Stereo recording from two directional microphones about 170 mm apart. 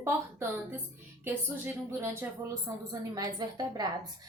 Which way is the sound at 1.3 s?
15° right (ahead or behind).